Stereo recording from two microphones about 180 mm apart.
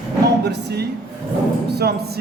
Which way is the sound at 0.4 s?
65° right (ahead or behind).